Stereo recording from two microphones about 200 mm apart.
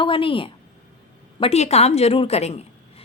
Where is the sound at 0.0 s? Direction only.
25° left (ahead or behind).